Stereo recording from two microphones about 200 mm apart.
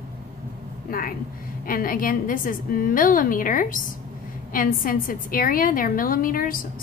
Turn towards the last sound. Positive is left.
turn(degrees=45)  # may be behind; listen again after turning